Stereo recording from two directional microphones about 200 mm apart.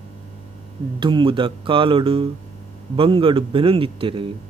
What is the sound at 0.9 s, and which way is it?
Speech, 25° right (ahead or behind).